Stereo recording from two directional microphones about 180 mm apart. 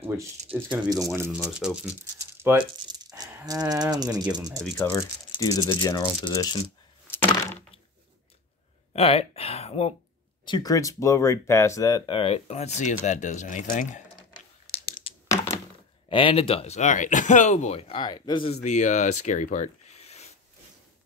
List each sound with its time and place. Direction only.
0.8 s speech: 20° right (ahead or behind)
2.1 s rattle: 10° right (ahead or behind)
2.9 s speech: 20° right (ahead or behind)
4.6 s speech: 5° left (ahead or behind)
4.9 s speech: 20° left (ahead or behind)
8.9 s speech: 35° left (ahead or behind)
10.4 s speech: 25° left (ahead or behind); by 14.0 s 40° left (ahead or behind)
15.2 s thunk: 15° left (ahead or behind)
16.1 s speech: 30° left (ahead or behind)
18.5 s speech: 40° left (ahead or behind)